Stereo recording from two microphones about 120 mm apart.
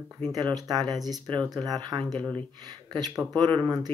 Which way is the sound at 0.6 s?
35° right (ahead or behind).